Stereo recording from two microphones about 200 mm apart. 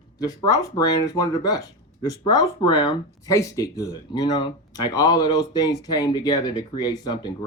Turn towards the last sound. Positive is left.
turn(degrees=20)  # may be behind; listen again after turning